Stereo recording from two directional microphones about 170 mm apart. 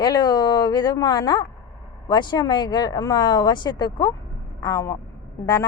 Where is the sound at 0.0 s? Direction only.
25° left (ahead or behind).